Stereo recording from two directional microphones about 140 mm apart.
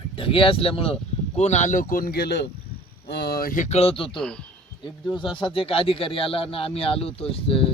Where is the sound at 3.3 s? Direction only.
80° left; by 4.2 s 40° left (ahead or behind).